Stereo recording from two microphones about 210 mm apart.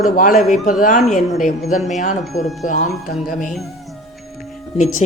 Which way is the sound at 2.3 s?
Centre (ahead or behind).